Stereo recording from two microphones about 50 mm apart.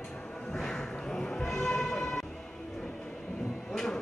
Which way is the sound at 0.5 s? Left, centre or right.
Centre.